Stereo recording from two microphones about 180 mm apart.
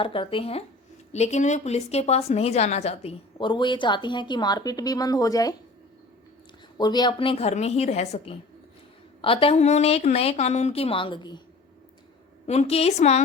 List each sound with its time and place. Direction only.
0.0 s a woman's voice: 30° left (ahead or behind)
6.7 s a woman's voice: 25° left (ahead or behind)
12.5 s a woman's voice: 35° left (ahead or behind)